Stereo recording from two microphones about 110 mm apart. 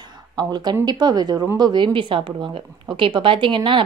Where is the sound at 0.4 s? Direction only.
40° right (ahead or behind).